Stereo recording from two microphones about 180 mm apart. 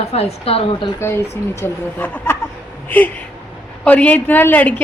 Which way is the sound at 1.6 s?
10° left (ahead or behind).